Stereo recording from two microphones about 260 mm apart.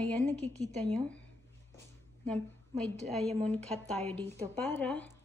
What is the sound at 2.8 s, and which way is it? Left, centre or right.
A woman's voice, centre.